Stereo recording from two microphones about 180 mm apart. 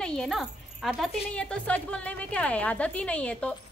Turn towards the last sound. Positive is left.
turn(degrees=5)  # may be behind; listen again after turning